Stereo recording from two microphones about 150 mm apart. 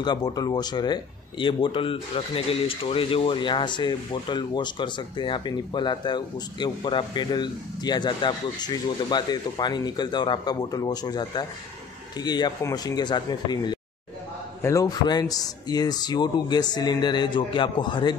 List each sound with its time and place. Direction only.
0.0 s speech: 25° left (ahead or behind)